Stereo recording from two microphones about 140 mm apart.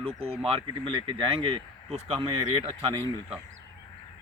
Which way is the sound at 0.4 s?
40° right (ahead or behind).